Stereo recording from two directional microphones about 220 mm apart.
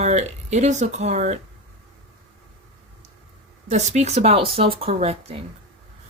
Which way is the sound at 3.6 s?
30° right (ahead or behind).